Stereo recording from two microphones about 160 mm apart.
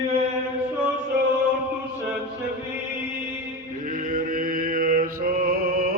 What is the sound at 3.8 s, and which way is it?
Mantra, 60° right (ahead or behind).